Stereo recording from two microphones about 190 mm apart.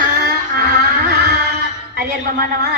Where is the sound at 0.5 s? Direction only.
55° right (ahead or behind).